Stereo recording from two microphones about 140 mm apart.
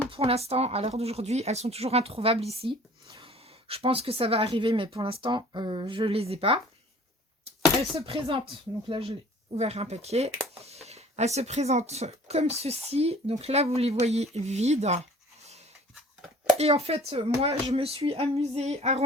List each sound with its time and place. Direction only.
0.1 s speech: 45° right (ahead or behind)
7.9 s speech: 45° right (ahead or behind)
16.6 s speech: 50° right (ahead or behind)